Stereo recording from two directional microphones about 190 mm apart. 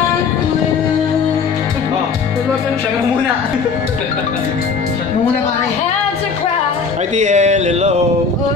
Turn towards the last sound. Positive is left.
turn(degrees=-35)  # may be behind; listen again after turning